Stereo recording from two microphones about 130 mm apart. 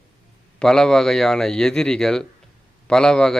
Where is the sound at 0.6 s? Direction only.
5° left (ahead or behind).